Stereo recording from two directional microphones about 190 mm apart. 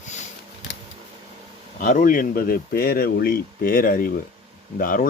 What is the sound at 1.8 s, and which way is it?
Speech, 45° left (ahead or behind).